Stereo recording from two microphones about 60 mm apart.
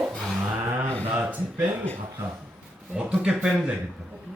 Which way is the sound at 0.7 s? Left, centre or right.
Right.